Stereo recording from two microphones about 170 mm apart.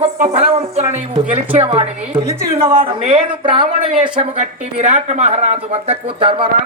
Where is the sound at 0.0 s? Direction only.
35° right (ahead or behind).